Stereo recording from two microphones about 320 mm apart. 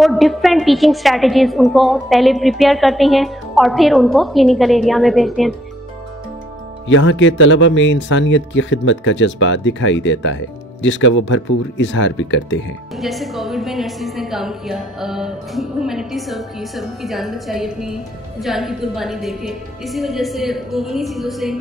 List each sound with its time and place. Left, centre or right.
0.0 s a woman's voice: centre
6.9 s speech: left
12.9 s a woman's voice: centre